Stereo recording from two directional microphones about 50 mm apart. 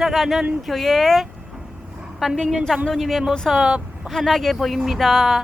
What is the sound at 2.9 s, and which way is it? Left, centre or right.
Speech, centre.